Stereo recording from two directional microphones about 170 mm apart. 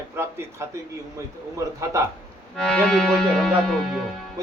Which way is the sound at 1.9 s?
15° right (ahead or behind).